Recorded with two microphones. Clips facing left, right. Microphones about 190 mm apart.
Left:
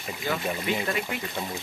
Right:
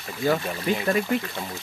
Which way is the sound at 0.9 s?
35° right (ahead or behind).